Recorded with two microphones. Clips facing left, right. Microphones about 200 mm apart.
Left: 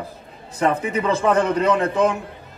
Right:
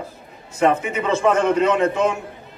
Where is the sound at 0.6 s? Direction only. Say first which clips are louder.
Right 2 dB; 35° left (ahead or behind).